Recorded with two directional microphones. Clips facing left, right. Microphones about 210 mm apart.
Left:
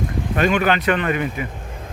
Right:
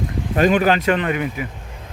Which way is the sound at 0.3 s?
35° right (ahead or behind).